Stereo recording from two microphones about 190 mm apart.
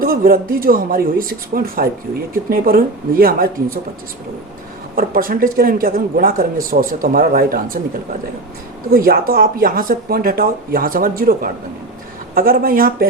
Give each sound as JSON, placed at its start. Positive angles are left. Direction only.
{"t": 0.0, "sound": "speech", "side_deg": -50}
{"t": 4.9, "sound": "speech", "side_deg": -50}
{"t": 8.9, "sound": "speech", "side_deg": -50}